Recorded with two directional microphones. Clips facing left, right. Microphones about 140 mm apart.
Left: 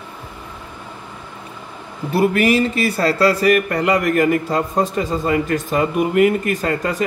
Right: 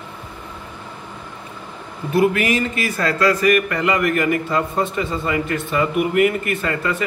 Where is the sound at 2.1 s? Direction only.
35° left (ahead or behind).